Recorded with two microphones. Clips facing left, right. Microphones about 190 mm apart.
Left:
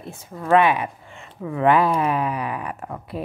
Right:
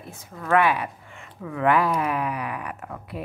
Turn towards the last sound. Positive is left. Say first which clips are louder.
# left 4 dB
turn(degrees=30)  # may be behind; listen again after turning